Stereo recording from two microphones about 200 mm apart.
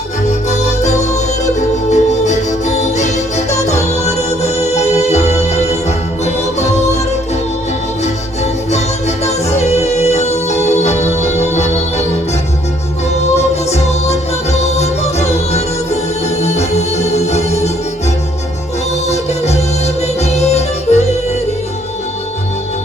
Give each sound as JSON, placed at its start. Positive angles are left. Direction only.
{"t": 0.3, "sound": "music", "side_deg": 35}
{"t": 8.7, "sound": "music", "side_deg": 35}
{"t": 11.5, "sound": "organ", "side_deg": 35}
{"t": 13.3, "sound": "music", "side_deg": 35}
{"t": 19.0, "sound": "music", "side_deg": 35}